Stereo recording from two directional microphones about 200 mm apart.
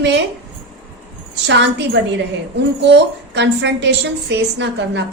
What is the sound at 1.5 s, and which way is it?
A woman's voice, 60° right (ahead or behind).